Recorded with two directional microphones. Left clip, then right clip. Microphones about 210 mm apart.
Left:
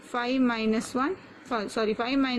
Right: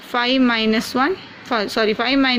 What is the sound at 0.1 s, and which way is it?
Speech, 15° right (ahead or behind).